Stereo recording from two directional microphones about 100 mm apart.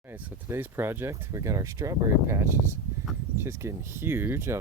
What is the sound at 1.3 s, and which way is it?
Speech, 35° right (ahead or behind).